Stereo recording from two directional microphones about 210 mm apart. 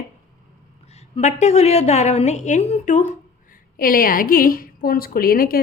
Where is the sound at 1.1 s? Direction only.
35° left (ahead or behind).